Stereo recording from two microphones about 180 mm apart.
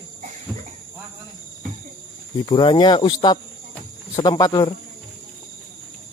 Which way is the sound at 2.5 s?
25° left (ahead or behind).